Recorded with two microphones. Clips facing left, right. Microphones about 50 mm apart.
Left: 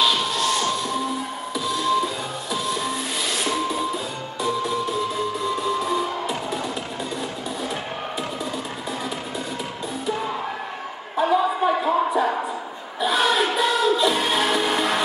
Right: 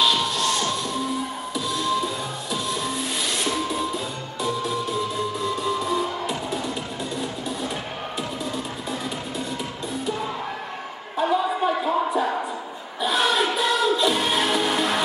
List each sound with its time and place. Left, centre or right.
0.0 s music: centre
11.1 s a sound: centre
13.0 s music: centre